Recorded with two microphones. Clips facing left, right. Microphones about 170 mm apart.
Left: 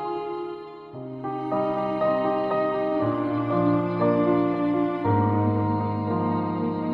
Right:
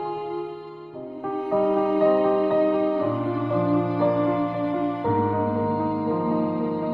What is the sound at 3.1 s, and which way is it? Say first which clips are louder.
Music: even; centre (ahead or behind).